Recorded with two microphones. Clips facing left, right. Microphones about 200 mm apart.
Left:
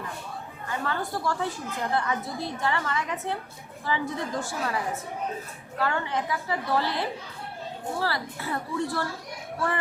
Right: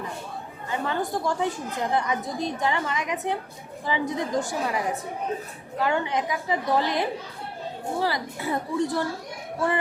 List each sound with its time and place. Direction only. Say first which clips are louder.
0.7 s a woman's voice: right 3 dB; 20° right (ahead or behind)